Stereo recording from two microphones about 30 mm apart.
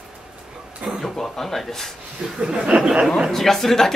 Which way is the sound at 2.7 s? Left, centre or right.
Right.